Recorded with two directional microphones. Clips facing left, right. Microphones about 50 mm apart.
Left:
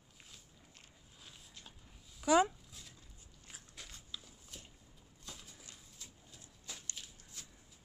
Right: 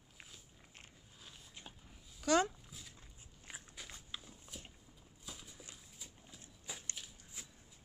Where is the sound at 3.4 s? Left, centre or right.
Right.